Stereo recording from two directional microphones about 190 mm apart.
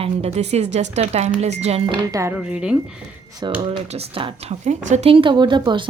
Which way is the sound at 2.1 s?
10° right (ahead or behind).